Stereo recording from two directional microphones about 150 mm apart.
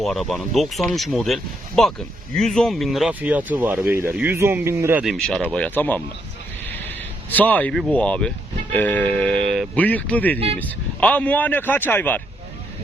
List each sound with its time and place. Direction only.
0.0 s speech: centre (ahead or behind); by 5.0 s 15° right (ahead or behind)
5.0 s speech: centre (ahead or behind)
7.3 s speech: 10° left (ahead or behind)